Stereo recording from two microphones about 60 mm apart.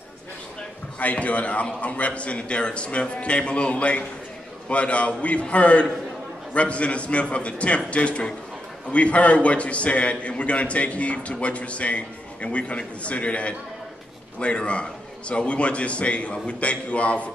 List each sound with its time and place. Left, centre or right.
0.9 s a man's voice: left